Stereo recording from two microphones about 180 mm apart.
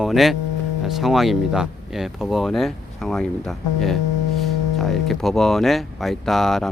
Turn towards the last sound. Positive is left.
turn(degrees=0)  # may be behind; listen again after turning